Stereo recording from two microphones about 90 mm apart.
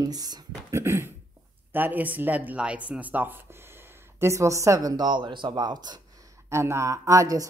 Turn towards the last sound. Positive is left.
turn(degrees=-40)  # may be behind; listen again after turning